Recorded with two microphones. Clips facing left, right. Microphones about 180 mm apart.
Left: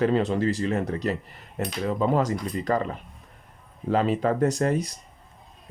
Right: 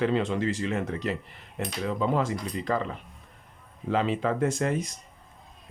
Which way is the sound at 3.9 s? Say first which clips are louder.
Left 3 dB; 40° left (ahead or behind).